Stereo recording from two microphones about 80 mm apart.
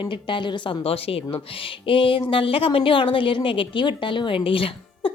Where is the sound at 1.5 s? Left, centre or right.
Left.